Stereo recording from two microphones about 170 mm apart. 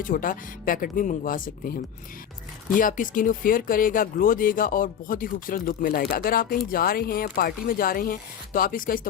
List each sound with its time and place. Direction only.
0.0 s speech: 55° left (ahead or behind)